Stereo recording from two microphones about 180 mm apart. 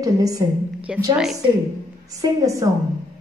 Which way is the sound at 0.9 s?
5° right (ahead or behind).